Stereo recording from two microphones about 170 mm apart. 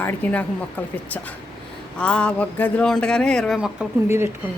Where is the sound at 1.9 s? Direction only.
5° left (ahead or behind).